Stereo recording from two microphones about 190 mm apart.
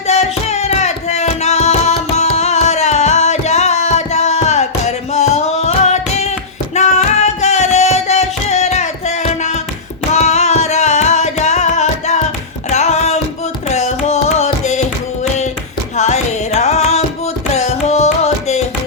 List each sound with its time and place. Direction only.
0.1 s music: 35° left (ahead or behind)
16.0 s music: 35° left (ahead or behind)
17.5 s carnatic music: 35° left (ahead or behind)